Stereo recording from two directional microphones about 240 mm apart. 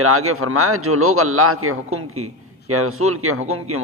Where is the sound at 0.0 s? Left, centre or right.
Right.